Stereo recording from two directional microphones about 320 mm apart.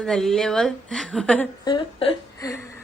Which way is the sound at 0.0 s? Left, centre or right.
Centre.